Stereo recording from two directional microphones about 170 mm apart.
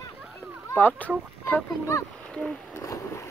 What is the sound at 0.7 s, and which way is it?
Speech, 10° left (ahead or behind).